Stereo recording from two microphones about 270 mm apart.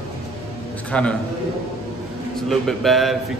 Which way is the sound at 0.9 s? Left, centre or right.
Centre.